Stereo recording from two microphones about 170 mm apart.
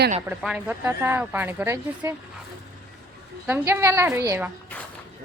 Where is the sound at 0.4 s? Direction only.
10° right (ahead or behind).